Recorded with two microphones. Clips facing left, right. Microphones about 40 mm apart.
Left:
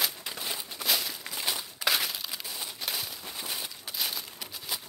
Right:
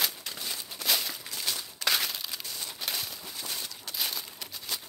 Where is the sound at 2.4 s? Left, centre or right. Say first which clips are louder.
Left 1 dB; centre.